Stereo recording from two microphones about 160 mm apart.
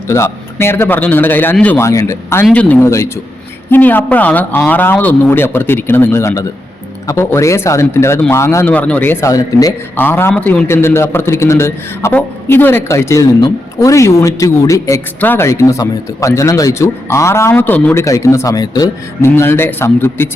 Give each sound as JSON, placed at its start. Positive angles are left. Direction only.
{"t": 0.1, "sound": "a man's voice", "side_deg": 15}
{"t": 19.3, "sound": "a man's voice", "side_deg": 15}